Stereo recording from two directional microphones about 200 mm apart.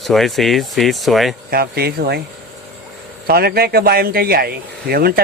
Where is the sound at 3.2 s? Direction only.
50° right (ahead or behind).